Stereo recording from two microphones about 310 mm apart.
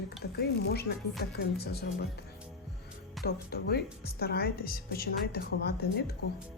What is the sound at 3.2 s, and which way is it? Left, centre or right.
A woman's voice, left.